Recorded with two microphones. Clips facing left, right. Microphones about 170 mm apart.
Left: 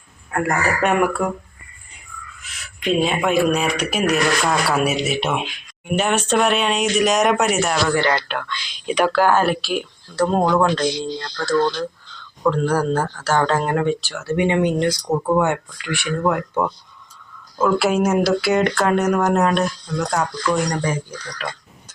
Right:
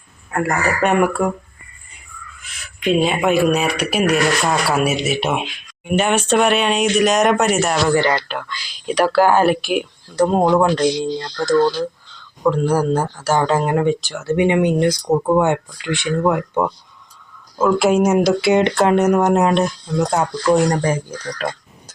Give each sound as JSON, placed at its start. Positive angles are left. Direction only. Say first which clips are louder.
{"t": 0.3, "sound": "speech", "louder": "right 1 dB", "side_deg": -5}
{"t": 2.8, "sound": "speech", "louder": "right 3 dB", "side_deg": -5}
{"t": 7.9, "sound": "speech", "louder": "right 3 dB", "side_deg": -15}
{"t": 21.3, "sound": "crow", "louder": "right 5 dB", "side_deg": -40}